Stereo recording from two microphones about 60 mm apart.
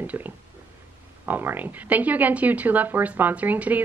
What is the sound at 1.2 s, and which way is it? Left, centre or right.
A woman's voice, right.